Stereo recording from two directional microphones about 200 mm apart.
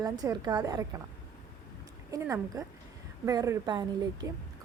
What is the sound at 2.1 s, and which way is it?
Speech, 15° right (ahead or behind).